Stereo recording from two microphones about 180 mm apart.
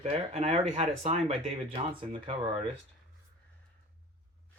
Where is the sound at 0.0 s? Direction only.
35° right (ahead or behind).